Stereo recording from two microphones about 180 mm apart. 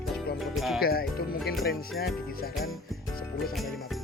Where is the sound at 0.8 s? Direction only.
55° left (ahead or behind).